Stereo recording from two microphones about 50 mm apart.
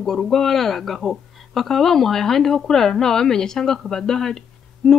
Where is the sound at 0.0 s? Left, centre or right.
Centre.